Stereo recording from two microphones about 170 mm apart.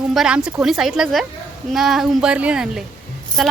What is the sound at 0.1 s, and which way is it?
A woman's voice, 5° right (ahead or behind).